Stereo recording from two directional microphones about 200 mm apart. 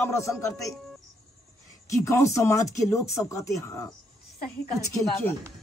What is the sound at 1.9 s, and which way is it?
Speech, 15° left (ahead or behind).